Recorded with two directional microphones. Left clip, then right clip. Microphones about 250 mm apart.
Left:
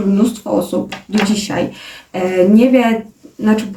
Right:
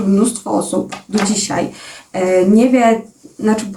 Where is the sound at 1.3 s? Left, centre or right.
Centre.